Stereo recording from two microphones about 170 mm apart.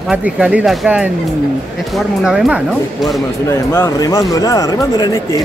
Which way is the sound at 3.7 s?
20° left (ahead or behind).